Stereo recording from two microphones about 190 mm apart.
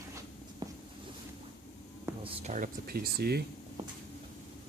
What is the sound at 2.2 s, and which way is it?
Speech, 40° right (ahead or behind).